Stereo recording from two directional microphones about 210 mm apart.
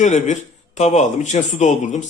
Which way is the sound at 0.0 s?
35° left (ahead or behind).